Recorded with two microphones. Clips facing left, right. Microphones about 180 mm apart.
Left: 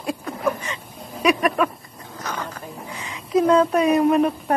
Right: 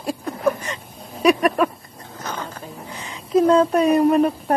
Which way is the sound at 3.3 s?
30° right (ahead or behind).